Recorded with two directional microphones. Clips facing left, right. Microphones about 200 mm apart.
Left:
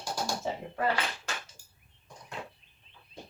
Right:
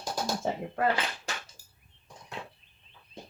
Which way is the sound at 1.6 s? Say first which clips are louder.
Even; 35° right (ahead or behind).